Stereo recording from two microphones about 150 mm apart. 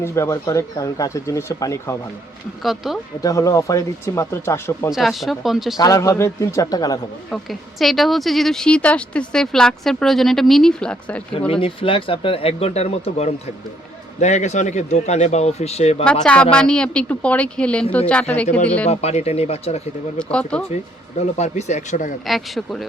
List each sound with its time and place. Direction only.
0.0 s speech: 20° left (ahead or behind)
2.6 s speech: centre (ahead or behind)
3.2 s speech: 20° left (ahead or behind)
4.9 s speech: centre (ahead or behind)
5.7 s speech: 25° left (ahead or behind)
7.8 s speech: centre (ahead or behind)
11.3 s a man's voice: 40° left (ahead or behind)
16.2 s a woman's voice: 5° left (ahead or behind)
18.9 s a man's voice: 45° left (ahead or behind)
20.1 s a woman's voice: 5° left (ahead or behind)
21.2 s a man's voice: 45° left (ahead or behind)
22.3 s speech: centre (ahead or behind)